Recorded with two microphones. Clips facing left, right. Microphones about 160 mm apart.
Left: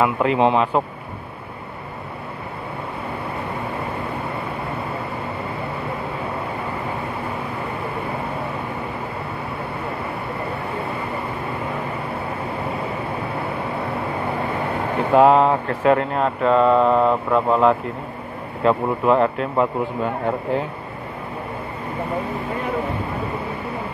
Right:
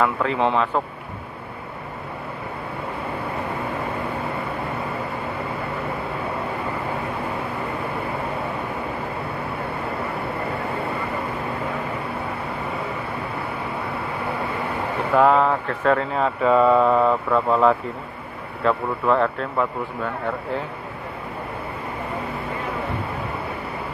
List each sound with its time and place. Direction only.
0.0 s speech: 15° left (ahead or behind)
15.1 s speech: 25° left (ahead or behind)
16.2 s mantra: 5° right (ahead or behind)
18.6 s speech: 25° left (ahead or behind)